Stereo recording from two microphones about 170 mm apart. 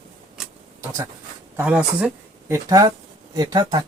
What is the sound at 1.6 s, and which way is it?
Speech, 10° right (ahead or behind).